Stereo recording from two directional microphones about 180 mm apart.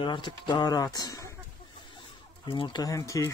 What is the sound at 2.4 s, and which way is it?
Speech, 25° left (ahead or behind).